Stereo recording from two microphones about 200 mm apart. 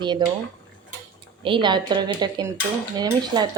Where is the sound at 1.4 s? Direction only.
25° right (ahead or behind).